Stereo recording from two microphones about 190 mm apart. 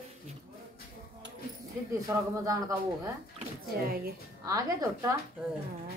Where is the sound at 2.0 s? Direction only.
15° right (ahead or behind).